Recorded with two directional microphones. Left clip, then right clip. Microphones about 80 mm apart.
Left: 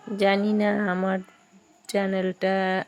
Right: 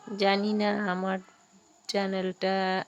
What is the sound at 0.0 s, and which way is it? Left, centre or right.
A woman's voice, left.